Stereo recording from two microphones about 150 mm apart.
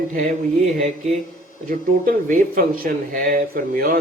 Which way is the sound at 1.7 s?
70° right (ahead or behind).